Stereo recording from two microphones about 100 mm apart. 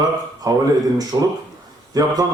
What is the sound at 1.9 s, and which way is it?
Speech, 40° right (ahead or behind).